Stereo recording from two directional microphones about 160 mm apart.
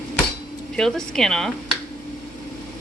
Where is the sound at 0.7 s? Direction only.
5° left (ahead or behind).